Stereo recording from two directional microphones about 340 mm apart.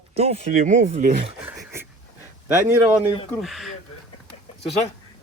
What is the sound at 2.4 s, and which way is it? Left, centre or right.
Speech, centre.